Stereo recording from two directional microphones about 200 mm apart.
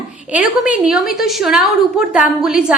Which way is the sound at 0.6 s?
5° right (ahead or behind).